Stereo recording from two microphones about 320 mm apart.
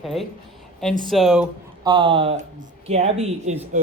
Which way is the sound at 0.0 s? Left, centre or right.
Centre.